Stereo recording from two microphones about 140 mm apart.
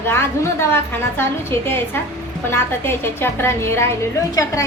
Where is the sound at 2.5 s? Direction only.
15° left (ahead or behind).